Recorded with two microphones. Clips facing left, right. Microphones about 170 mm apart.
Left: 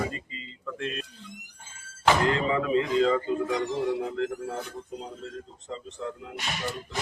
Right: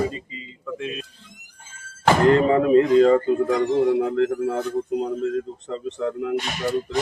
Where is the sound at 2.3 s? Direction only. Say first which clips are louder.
Right 9 dB; 50° right (ahead or behind); by 6.4 s 65° right (ahead or behind).